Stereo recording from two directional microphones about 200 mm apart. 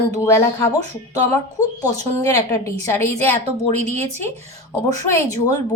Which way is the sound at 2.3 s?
15° left (ahead or behind).